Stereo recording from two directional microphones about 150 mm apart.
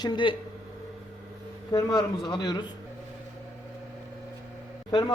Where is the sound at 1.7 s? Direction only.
25° left (ahead or behind).